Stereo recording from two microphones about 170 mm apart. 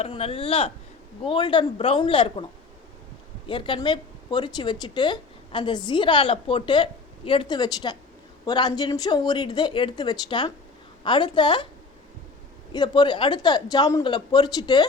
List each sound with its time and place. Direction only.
0.0 s a man's voice: 35° left (ahead or behind)
3.4 s a woman's voice: 30° left (ahead or behind)
12.7 s a woman's voice: 25° left (ahead or behind)